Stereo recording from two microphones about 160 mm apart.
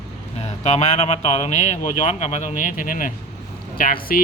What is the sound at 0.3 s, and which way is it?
Speech, 45° left (ahead or behind).